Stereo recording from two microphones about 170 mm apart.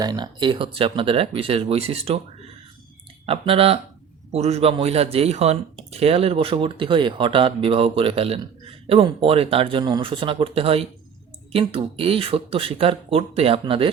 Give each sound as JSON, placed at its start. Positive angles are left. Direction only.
{"t": 0.0, "sound": "speech", "side_deg": -25}
{"t": 3.2, "sound": "speech", "side_deg": -35}